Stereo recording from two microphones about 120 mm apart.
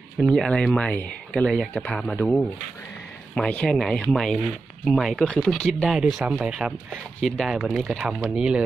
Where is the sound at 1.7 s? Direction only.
15° left (ahead or behind).